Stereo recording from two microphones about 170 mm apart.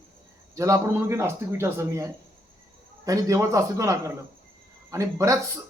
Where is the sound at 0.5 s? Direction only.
20° right (ahead or behind).